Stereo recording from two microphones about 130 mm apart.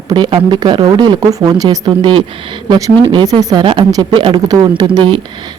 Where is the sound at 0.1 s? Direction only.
35° right (ahead or behind).